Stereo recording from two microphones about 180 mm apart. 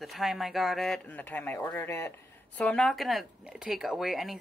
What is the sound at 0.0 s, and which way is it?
Speech, centre (ahead or behind).